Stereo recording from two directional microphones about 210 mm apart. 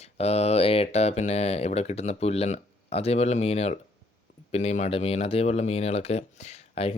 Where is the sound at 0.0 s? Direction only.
30° left (ahead or behind).